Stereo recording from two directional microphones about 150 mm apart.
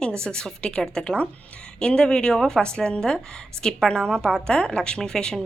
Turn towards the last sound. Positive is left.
turn(degrees=5)  # may be behind; listen again after turning